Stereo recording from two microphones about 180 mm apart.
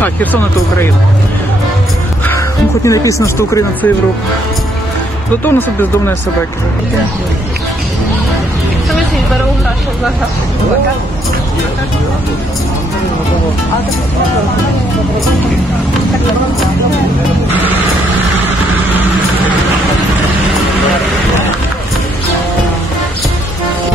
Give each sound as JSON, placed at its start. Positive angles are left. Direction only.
{"t": 0.0, "sound": "speech", "side_deg": 10}
{"t": 2.2, "sound": "speech", "side_deg": 15}
{"t": 5.4, "sound": "speech", "side_deg": 10}